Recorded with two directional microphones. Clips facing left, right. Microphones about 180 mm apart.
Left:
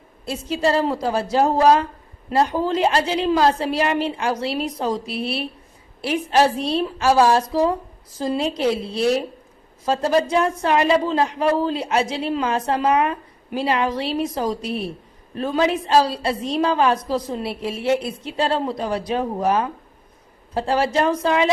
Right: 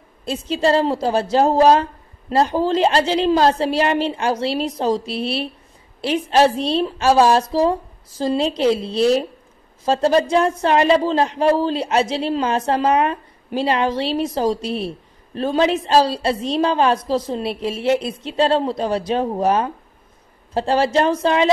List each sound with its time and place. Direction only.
0.2 s a woman's voice: 25° right (ahead or behind)